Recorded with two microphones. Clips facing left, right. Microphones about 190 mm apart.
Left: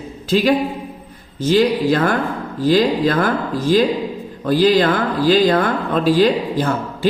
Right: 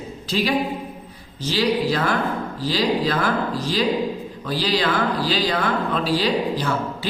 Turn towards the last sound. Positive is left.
turn(degrees=50)  # may be behind; listen again after turning